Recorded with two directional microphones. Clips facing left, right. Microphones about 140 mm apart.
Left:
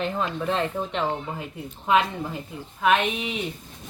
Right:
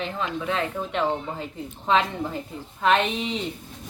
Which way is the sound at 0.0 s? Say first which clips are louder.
Left 2 dB; centre (ahead or behind).